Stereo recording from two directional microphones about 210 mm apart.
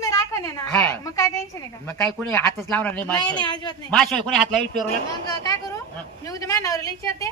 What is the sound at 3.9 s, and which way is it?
Speech, 5° left (ahead or behind).